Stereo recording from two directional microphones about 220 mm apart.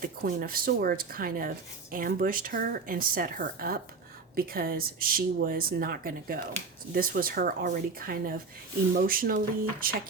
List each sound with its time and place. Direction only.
0.0 s speech: 40° right (ahead or behind)